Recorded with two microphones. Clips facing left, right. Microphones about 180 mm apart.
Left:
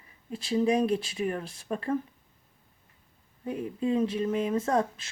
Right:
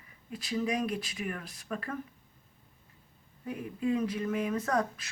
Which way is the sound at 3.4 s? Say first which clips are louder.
Left 3 dB; 30° left (ahead or behind).